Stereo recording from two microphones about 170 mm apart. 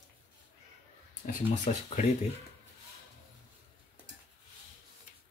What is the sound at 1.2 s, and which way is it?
Speech, 50° left (ahead or behind).